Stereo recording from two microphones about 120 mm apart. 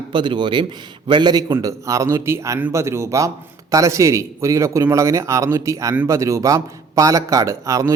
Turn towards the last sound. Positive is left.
turn(degrees=-25)  # may be behind; listen again after turning